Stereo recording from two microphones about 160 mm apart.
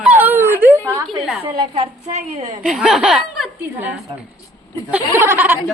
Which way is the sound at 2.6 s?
5° right (ahead or behind).